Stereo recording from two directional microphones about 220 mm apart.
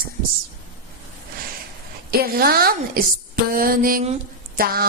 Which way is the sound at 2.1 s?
45° right (ahead or behind).